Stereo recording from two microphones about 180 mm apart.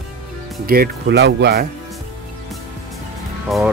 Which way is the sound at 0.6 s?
65° right (ahead or behind).